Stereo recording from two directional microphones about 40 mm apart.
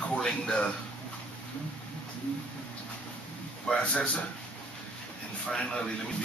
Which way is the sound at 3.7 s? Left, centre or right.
Left.